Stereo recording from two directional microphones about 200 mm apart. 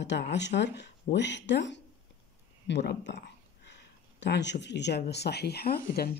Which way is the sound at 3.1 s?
55° left (ahead or behind).